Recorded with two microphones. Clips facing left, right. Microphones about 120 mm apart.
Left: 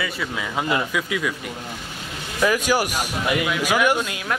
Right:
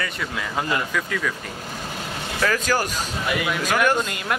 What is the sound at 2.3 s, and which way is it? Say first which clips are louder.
Speech: left 3 dB; 15° left (ahead or behind).